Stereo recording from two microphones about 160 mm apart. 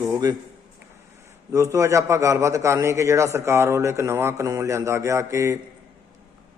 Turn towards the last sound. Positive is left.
turn(degrees=-20)  # may be behind; listen again after turning